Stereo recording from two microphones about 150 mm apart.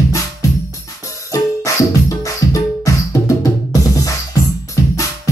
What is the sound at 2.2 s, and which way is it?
Music, 20° left (ahead or behind).